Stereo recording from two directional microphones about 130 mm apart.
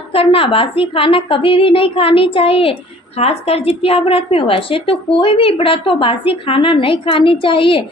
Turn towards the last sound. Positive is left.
turn(degrees=40)  # may be behind; listen again after turning